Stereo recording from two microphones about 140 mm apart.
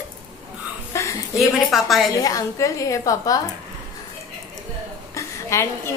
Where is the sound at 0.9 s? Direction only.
20° left (ahead or behind).